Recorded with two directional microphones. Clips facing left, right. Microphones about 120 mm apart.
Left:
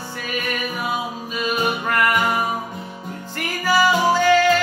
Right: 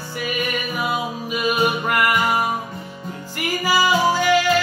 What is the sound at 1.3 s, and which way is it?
Music, 10° right (ahead or behind).